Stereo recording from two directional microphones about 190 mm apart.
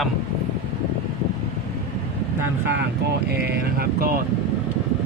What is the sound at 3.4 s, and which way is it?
Speech, 55° right (ahead or behind).